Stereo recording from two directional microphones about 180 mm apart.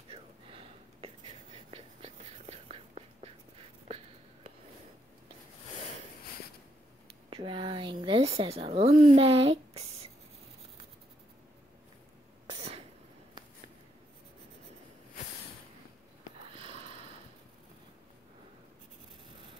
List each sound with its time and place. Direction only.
0.1 s whispering: 30° right (ahead or behind)
7.2 s a sound: 30° right (ahead or behind)
12.4 s cough: 25° right (ahead or behind)
16.5 s sniff: 30° right (ahead or behind)